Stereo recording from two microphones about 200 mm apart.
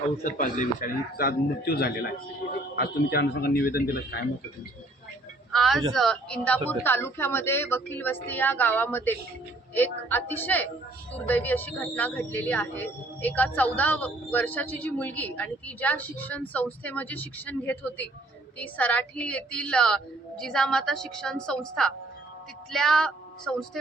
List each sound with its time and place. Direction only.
0.3 s speech: 40° left (ahead or behind)
5.5 s a man's voice: centre (ahead or behind)